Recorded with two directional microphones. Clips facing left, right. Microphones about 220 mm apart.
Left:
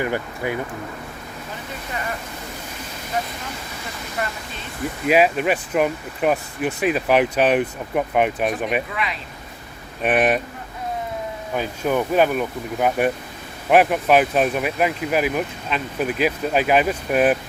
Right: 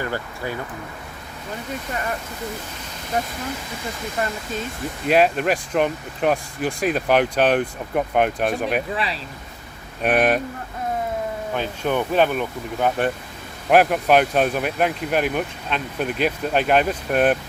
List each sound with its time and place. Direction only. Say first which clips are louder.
0.0 s speech: left 3 dB; 20° left (ahead or behind)
5.0 s speech: even; 5° left (ahead or behind)
10.0 s speech: even; centre (ahead or behind)
11.5 s speech: left 2 dB; 5° left (ahead or behind)